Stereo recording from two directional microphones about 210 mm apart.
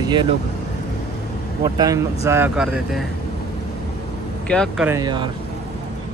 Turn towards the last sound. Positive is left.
turn(degrees=-20)  # may be behind; listen again after turning